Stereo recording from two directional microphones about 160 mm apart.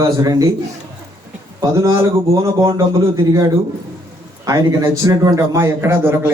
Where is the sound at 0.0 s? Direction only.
20° right (ahead or behind).